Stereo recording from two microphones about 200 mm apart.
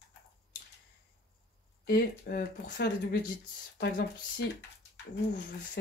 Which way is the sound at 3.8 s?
55° left (ahead or behind).